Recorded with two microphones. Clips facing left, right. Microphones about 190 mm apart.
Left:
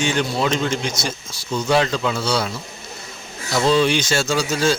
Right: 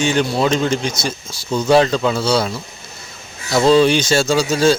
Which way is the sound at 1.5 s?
35° right (ahead or behind).